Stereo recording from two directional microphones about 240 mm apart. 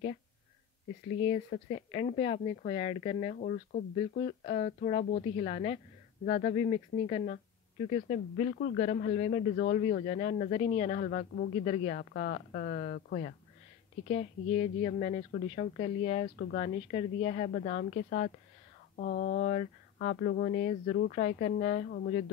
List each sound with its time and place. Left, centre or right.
1.5 s a woman's voice: left